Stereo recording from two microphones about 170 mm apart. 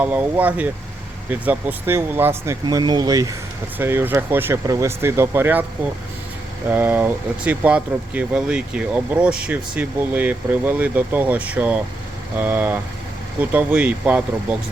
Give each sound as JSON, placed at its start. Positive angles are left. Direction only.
{"t": 0.0, "sound": "speech", "side_deg": -10}
{"t": 2.6, "sound": "speech", "side_deg": -25}
{"t": 6.7, "sound": "speech", "side_deg": -10}